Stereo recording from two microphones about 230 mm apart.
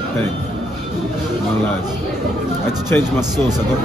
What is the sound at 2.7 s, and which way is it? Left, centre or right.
Speech, centre.